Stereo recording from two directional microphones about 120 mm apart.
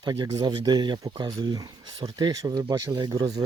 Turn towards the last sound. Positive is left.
turn(degrees=-35)  # may be behind; listen again after turning